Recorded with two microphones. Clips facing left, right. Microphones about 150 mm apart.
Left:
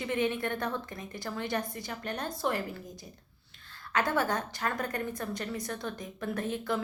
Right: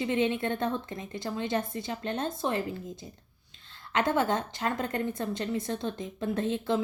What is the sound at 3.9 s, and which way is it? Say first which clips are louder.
A woman's voice: right 3 dB; 20° right (ahead or behind).